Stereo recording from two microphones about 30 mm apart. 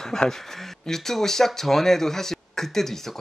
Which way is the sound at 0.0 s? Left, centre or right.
Centre.